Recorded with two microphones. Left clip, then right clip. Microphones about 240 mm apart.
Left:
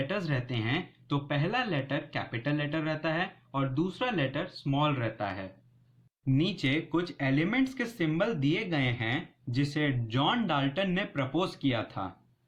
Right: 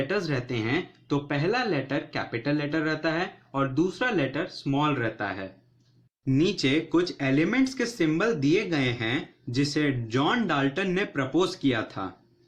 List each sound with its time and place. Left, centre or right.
0.1 s speech: left